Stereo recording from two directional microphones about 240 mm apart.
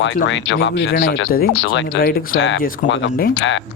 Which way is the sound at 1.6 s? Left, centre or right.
Left.